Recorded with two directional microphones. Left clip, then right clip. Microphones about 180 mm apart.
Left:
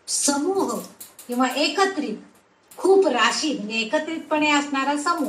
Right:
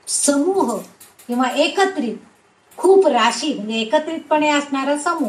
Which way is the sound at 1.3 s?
35° right (ahead or behind).